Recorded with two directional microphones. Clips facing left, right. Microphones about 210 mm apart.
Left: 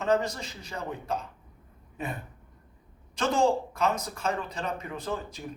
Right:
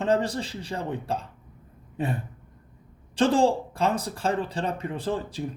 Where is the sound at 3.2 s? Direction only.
30° right (ahead or behind).